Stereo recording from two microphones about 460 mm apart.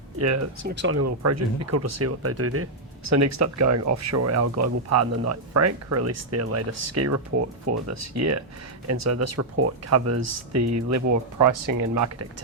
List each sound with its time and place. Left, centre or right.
0.2 s speech: right